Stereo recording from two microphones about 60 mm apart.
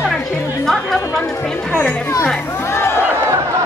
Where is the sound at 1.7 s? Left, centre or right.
Left.